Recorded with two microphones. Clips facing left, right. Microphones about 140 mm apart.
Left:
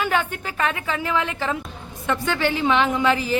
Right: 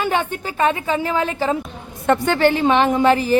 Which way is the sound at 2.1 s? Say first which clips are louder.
Right 7 dB; 50° right (ahead or behind).